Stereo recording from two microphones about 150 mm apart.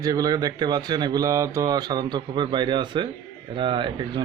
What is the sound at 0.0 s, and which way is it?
Speech, 25° right (ahead or behind).